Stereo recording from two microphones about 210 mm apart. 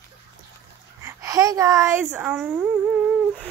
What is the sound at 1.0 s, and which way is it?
A woman's voice, 15° right (ahead or behind).